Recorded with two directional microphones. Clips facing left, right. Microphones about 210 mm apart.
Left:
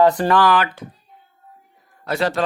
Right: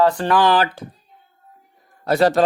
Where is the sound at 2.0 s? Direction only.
40° right (ahead or behind).